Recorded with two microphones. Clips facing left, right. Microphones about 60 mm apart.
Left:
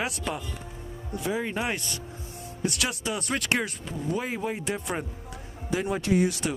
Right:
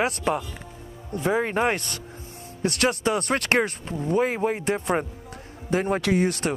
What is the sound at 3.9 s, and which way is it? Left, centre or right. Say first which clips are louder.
Speech: right 7 dB; right.